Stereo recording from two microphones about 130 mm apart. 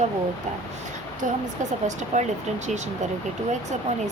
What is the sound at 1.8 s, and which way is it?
Speech, 65° right (ahead or behind).